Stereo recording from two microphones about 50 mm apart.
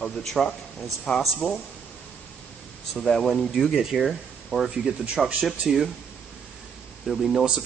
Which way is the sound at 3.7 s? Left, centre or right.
Centre.